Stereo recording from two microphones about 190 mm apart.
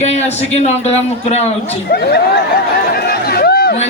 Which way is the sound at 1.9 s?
55° left (ahead or behind).